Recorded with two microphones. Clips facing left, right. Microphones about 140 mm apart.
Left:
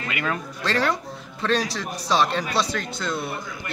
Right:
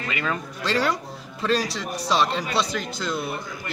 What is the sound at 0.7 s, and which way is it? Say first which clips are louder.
A man's voice: even; 5° right (ahead or behind).